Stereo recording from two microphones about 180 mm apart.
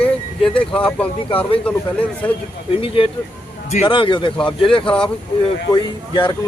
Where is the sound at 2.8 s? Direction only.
30° left (ahead or behind).